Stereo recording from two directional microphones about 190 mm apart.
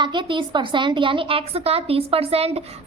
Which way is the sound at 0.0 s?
25° right (ahead or behind).